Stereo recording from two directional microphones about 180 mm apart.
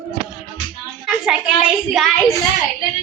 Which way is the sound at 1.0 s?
5° right (ahead or behind).